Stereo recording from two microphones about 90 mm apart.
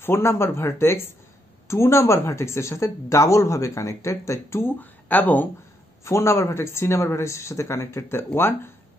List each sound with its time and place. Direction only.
0.0 s speech: 30° left (ahead or behind)
6.0 s speech: 30° left (ahead or behind)